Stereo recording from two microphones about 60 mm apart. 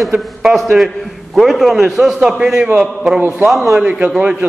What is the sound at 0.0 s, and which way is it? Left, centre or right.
A man's voice, centre.